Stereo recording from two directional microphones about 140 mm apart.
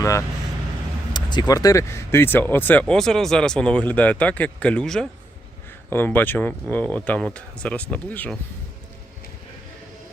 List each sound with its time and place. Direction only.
0.0 s speech: 20° left (ahead or behind)
1.1 s speech: 30° left (ahead or behind); by 8.4 s 10° left (ahead or behind)